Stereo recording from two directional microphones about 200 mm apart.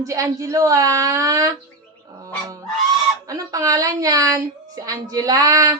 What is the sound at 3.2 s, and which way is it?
A woman's voice, 15° right (ahead or behind).